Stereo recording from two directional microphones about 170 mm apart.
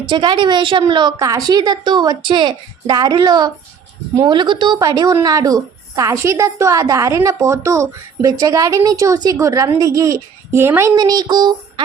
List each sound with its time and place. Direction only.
0.1 s a woman's voice: 25° right (ahead or behind)